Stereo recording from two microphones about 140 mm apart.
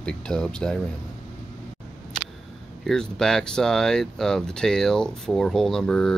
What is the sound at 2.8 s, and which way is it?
Speech, 5° left (ahead or behind).